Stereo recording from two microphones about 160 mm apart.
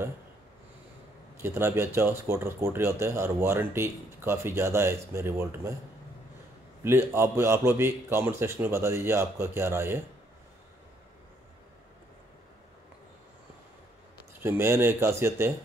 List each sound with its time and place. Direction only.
1.4 s speech: 15° right (ahead or behind)
6.8 s speech: 15° right (ahead or behind)
14.4 s speech: 15° right (ahead or behind)